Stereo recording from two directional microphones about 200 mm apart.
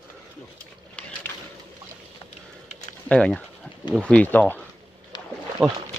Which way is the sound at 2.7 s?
35° left (ahead or behind).